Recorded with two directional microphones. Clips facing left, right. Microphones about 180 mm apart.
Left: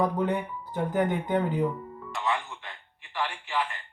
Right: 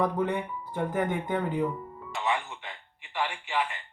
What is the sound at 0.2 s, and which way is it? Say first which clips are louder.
Speech: left 1 dB; centre (ahead or behind).